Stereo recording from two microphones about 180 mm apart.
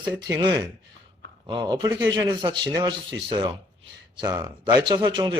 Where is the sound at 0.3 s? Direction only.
25° right (ahead or behind).